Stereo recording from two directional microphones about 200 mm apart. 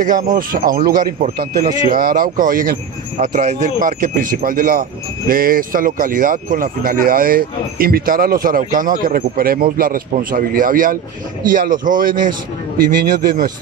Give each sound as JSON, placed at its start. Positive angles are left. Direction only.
{"t": 0.0, "sound": "a man's voice", "side_deg": -45}